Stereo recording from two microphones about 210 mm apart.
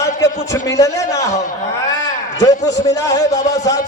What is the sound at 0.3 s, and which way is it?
A man's voice, 15° left (ahead or behind).